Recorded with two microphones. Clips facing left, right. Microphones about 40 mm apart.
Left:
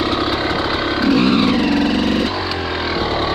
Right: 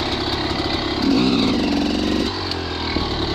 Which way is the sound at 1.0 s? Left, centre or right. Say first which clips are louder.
Left 3 dB; left.